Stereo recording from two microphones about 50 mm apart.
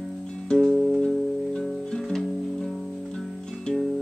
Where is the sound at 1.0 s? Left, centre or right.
Centre.